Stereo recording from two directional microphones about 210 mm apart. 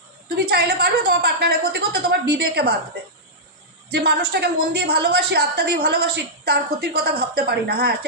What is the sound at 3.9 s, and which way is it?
A woman's voice, 50° right (ahead or behind).